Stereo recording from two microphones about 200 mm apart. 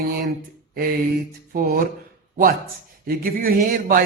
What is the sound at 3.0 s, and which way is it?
A man's voice, 45° right (ahead or behind).